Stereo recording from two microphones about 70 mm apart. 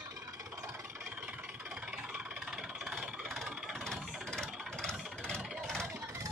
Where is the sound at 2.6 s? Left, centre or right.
Centre.